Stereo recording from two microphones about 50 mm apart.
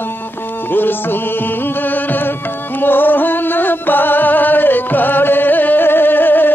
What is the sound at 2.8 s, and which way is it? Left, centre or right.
Music, left.